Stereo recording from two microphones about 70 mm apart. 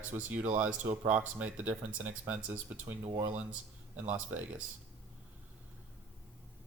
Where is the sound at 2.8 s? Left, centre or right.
Right.